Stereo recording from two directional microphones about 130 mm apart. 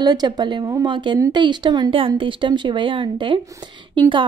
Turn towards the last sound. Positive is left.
turn(degrees=-40)  # may be behind; listen again after turning